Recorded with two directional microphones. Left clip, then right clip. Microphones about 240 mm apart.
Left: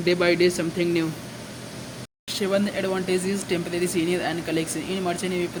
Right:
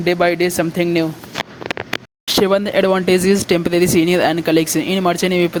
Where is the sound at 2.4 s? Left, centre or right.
Right.